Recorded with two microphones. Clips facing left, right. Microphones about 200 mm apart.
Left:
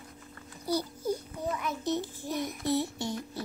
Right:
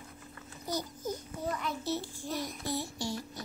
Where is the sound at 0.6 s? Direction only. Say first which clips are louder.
Left 5 dB; 10° left (ahead or behind).